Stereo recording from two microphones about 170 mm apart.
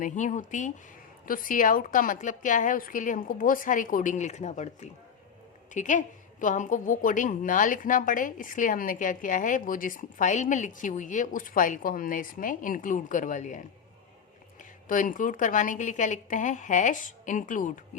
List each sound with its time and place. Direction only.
0.0 s a woman's voice: 45° left (ahead or behind)